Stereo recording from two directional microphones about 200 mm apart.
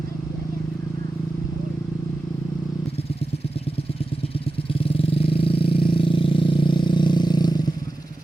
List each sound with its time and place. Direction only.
4.7 s vehicle: 25° left (ahead or behind)